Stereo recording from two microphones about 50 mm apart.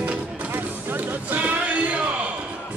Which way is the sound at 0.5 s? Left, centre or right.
Right.